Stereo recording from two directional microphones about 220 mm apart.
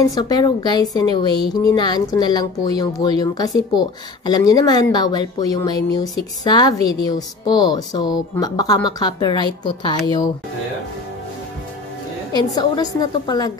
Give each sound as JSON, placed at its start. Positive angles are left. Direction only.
{"t": 0.1, "sound": "a woman's voice", "side_deg": 15}
{"t": 12.4, "sound": "a woman's voice", "side_deg": 20}